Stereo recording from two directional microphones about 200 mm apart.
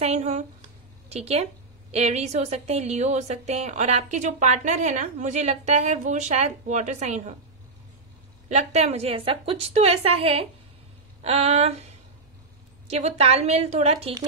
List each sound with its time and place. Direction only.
0.0 s a woman's voice: 35° right (ahead or behind)
8.5 s a woman's voice: 35° right (ahead or behind)